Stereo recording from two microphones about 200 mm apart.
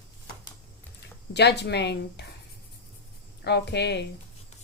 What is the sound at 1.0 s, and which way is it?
Speech, 60° left (ahead or behind).